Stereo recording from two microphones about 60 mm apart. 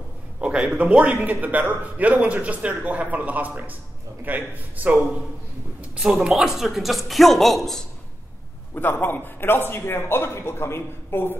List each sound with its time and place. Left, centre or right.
0.4 s speech: centre
5.9 s speech: centre
8.7 s a man's voice: left